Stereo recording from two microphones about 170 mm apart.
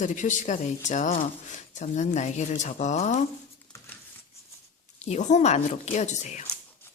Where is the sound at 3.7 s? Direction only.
5° left (ahead or behind).